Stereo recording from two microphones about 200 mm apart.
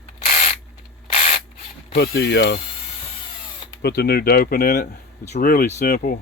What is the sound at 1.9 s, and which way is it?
Speech, 50° left (ahead or behind).